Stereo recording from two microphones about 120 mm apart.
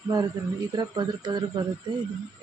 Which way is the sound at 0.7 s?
35° right (ahead or behind).